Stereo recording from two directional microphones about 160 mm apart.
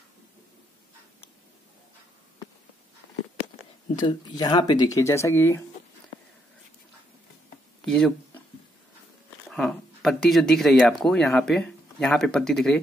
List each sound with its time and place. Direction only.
4.0 s speech: 25° left (ahead or behind)
7.8 s a sound: 5° left (ahead or behind)
9.5 s speech: 5° left (ahead or behind)